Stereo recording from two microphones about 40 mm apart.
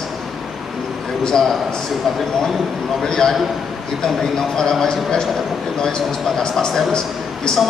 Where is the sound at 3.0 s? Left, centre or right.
Centre.